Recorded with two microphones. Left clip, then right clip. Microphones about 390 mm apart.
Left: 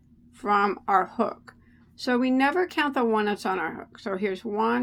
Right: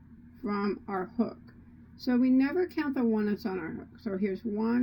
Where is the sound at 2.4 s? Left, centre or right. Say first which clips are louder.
Left 7 dB; centre.